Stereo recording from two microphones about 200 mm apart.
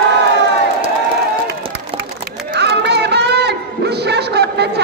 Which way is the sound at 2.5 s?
55° right (ahead or behind).